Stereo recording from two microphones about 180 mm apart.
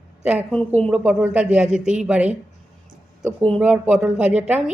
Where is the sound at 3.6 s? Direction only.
5° right (ahead or behind).